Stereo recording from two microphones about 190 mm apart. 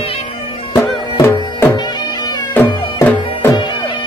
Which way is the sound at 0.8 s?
15° left (ahead or behind).